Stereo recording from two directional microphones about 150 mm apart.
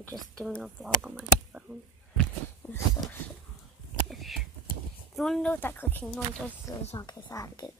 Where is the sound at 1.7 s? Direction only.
10° right (ahead or behind).